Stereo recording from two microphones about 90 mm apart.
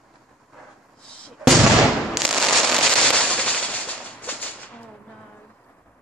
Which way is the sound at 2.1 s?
Centre (ahead or behind).